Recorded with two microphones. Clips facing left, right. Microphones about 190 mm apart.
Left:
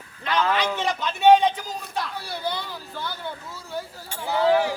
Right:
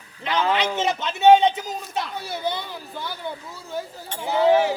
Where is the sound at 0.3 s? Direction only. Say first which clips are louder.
Right 1 dB; 20° right (ahead or behind).